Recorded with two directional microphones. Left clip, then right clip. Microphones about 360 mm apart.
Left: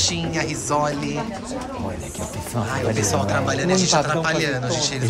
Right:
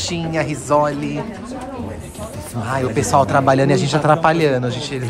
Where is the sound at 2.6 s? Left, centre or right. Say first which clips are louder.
Right 3 dB; centre.